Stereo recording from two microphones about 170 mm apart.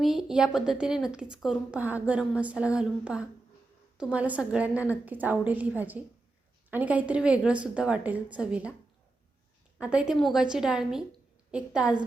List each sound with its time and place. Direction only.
0.0 s a woman's voice: centre (ahead or behind)
9.8 s a woman's voice: 5° right (ahead or behind)